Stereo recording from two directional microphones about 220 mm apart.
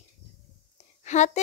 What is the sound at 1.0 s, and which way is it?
Speech, 30° left (ahead or behind).